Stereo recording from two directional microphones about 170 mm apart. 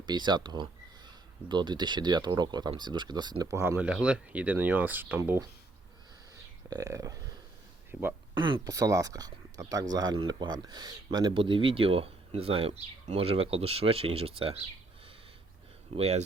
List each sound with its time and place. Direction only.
0.0 s speech: 25° right (ahead or behind)
3.6 s speech: 10° right (ahead or behind)
6.7 s speech: 20° right (ahead or behind)
8.4 s speech: 25° right (ahead or behind)
15.9 s speech: 40° right (ahead or behind)